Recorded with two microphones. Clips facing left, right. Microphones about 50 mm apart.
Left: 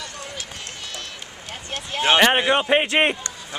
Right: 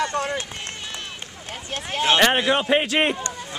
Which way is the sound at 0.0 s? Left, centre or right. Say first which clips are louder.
Right 12 dB; right.